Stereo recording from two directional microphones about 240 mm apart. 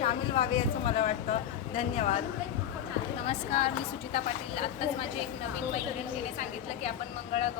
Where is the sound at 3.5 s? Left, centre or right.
Left.